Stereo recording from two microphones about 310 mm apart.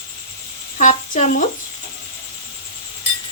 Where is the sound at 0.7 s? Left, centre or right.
Left.